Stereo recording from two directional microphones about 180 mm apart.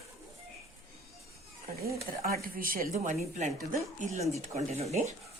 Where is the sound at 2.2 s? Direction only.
55° right (ahead or behind); by 5.1 s 35° right (ahead or behind).